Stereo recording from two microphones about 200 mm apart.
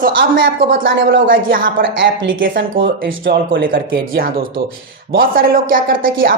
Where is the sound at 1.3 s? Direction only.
45° right (ahead or behind).